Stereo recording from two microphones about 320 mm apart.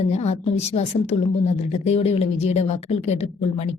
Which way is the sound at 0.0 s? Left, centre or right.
Centre.